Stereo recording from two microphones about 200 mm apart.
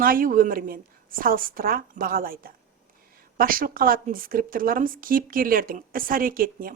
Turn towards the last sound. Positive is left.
turn(degrees=-45)  # may be behind; listen again after turning